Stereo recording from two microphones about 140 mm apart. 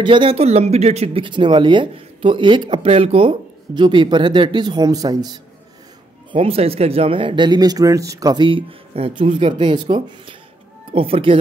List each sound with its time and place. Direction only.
0.0 s speech: 35° right (ahead or behind)
6.3 s speech: 45° right (ahead or behind)